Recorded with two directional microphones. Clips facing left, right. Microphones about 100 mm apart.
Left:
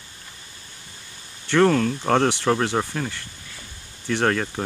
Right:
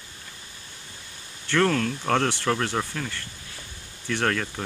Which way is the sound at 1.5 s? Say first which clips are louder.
Left 5 dB; 10° left (ahead or behind).